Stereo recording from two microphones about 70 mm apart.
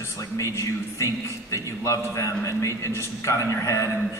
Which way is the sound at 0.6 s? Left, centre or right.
Left.